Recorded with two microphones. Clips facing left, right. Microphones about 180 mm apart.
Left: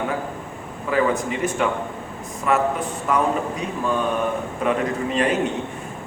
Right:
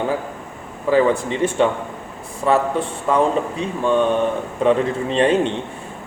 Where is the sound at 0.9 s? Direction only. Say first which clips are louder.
Right 5 dB; 30° right (ahead or behind).